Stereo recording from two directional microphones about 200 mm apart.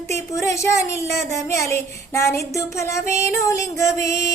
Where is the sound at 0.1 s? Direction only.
15° left (ahead or behind).